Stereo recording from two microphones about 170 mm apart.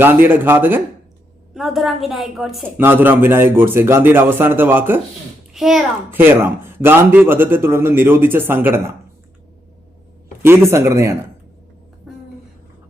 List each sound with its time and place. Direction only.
0.0 s a man's voice: 10° right (ahead or behind)
1.5 s a woman's voice: centre (ahead or behind)
2.7 s a man's voice: 10° right (ahead or behind)
5.5 s a child's voice: centre (ahead or behind)
6.1 s a man's voice: 10° right (ahead or behind)
10.4 s a man's voice: 15° right (ahead or behind)
12.1 s a sound: centre (ahead or behind)